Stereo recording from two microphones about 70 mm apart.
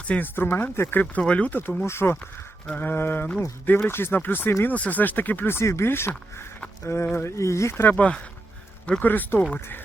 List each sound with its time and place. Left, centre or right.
0.0 s speech: centre
0.3 s speech: left
1.2 s speech: centre
1.8 s speech: left
7.8 s speech: left